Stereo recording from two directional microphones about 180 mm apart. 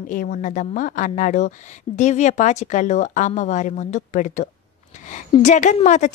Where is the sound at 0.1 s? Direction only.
50° left (ahead or behind).